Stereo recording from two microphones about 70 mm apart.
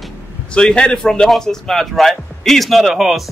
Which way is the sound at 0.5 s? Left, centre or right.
Centre.